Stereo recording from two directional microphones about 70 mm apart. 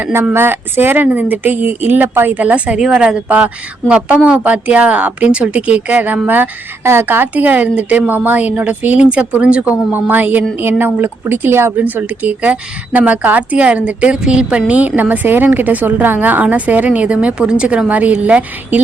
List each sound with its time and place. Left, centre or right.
0.0 s a woman's voice: right